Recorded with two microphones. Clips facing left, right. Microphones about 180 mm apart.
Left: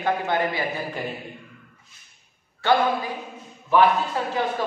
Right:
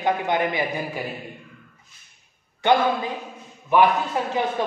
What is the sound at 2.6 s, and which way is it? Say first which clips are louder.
Speech: right 1 dB; 20° right (ahead or behind).